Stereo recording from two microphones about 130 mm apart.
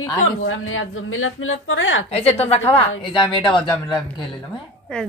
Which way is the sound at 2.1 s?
50° left (ahead or behind).